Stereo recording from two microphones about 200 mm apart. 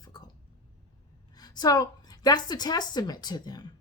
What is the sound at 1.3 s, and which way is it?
A woman's voice, 20° left (ahead or behind).